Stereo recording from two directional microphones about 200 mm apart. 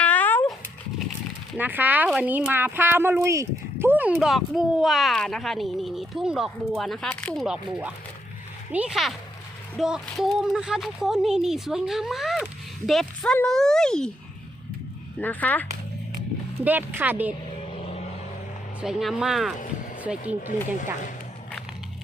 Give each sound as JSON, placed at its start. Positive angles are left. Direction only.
{"t": 0.0, "sound": "dog", "side_deg": 10}
{"t": 1.5, "sound": "speech", "side_deg": -10}
{"t": 7.4, "sound": "speech", "side_deg": -5}
{"t": 15.2, "sound": "speech", "side_deg": 10}
{"t": 16.6, "sound": "speech", "side_deg": -10}
{"t": 17.6, "sound": "vehicle", "side_deg": 30}
{"t": 18.8, "sound": "speech", "side_deg": 0}